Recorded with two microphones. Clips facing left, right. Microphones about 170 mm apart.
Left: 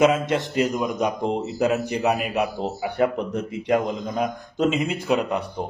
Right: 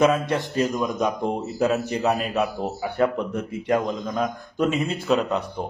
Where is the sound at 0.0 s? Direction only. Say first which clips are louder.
Left 1 dB; 20° left (ahead or behind).